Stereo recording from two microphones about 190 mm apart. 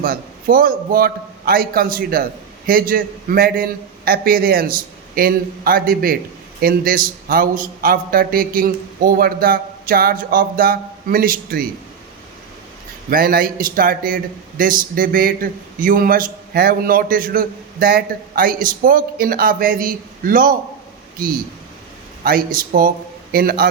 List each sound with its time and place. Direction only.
0.0 s a man's voice: 50° right (ahead or behind)
13.1 s a man's voice: 50° right (ahead or behind)
22.2 s a man's voice: 50° right (ahead or behind)